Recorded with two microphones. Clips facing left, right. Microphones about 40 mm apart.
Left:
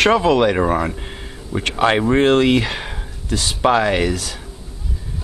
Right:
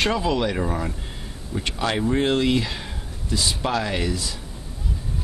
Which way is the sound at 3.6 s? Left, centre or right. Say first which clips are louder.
Left 14 dB; left.